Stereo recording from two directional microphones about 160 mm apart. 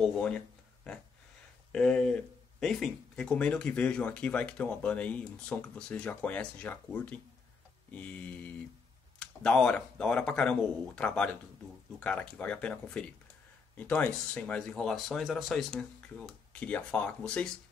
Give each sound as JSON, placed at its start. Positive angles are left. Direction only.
{"t": 0.0, "sound": "speech", "side_deg": 5}
{"t": 1.7, "sound": "speech", "side_deg": 5}